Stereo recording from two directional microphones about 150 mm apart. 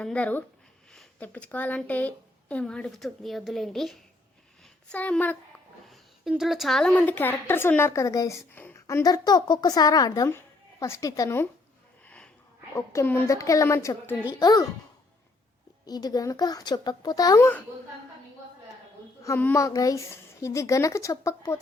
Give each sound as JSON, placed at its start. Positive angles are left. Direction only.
{"t": 0.0, "sound": "a woman's voice", "side_deg": 5}
{"t": 5.9, "sound": "a woman's voice", "side_deg": 0}
{"t": 12.0, "sound": "sniff", "side_deg": 10}
{"t": 12.7, "sound": "speech", "side_deg": 20}
{"t": 15.9, "sound": "speech", "side_deg": 25}
{"t": 19.2, "sound": "speech", "side_deg": 15}